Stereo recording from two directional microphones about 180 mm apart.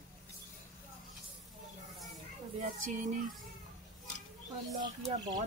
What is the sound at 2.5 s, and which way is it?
Speech, 45° right (ahead or behind).